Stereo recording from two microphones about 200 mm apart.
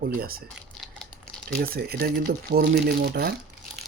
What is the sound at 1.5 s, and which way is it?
Speech, 50° right (ahead or behind).